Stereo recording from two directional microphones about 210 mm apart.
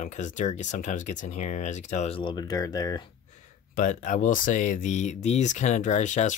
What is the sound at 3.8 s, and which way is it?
Speech, 35° left (ahead or behind).